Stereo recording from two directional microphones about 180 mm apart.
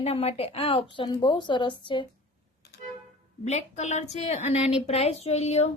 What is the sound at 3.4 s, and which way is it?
A woman's voice, 40° left (ahead or behind).